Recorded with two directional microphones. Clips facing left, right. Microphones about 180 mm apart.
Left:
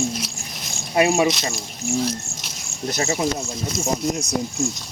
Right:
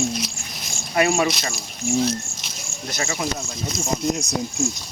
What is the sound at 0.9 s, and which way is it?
Speech, 20° left (ahead or behind).